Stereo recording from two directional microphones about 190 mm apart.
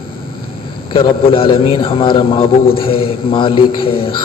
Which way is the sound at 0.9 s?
25° left (ahead or behind).